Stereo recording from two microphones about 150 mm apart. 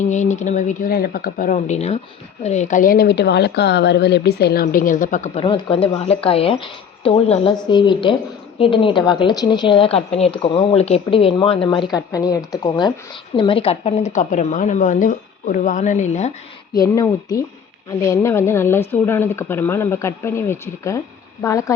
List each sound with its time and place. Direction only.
0.0 s speech: 50° left (ahead or behind)
5.3 s a woman's voice: 35° left (ahead or behind)
7.5 s a woman's voice: 30° left (ahead or behind); by 16.3 s 50° left (ahead or behind)
16.8 s speech: 20° left (ahead or behind)